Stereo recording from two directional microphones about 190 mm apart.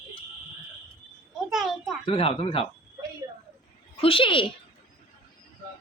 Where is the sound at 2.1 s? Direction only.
30° left (ahead or behind).